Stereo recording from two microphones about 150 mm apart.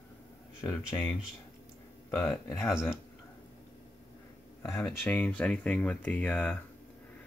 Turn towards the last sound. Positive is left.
turn(degrees=10)  # may be behind; listen again after turning